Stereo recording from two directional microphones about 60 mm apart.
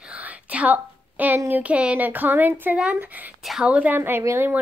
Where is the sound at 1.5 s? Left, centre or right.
Right.